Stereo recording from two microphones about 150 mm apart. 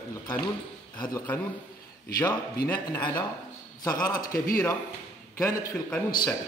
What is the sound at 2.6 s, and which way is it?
Speech, 15° left (ahead or behind).